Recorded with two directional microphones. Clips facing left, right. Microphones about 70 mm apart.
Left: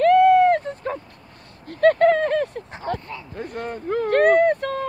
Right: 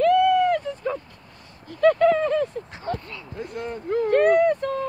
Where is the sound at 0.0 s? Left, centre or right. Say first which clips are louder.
Left 4 dB; left.